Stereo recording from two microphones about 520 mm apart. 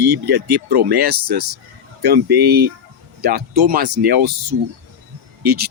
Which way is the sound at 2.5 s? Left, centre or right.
Centre.